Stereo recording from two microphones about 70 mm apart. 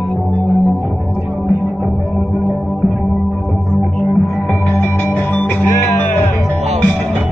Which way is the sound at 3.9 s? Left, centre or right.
Centre.